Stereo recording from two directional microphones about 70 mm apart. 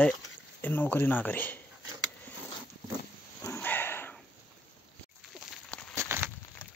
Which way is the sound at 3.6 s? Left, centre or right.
Left.